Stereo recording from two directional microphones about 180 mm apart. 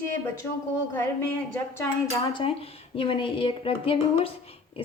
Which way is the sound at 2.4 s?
30° left (ahead or behind).